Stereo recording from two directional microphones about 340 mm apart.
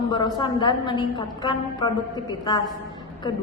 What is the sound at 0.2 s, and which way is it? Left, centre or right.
A woman's voice, centre.